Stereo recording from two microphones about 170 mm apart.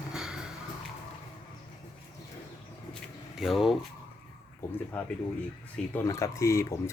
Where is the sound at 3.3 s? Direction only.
Centre (ahead or behind).